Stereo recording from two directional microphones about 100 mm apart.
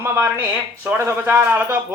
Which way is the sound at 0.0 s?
25° right (ahead or behind).